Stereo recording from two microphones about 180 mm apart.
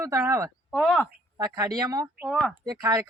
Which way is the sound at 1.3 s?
20° right (ahead or behind).